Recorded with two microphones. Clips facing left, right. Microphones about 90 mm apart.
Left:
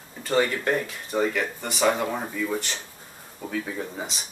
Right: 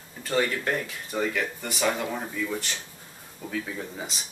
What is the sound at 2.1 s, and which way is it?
Speech, 25° left (ahead or behind).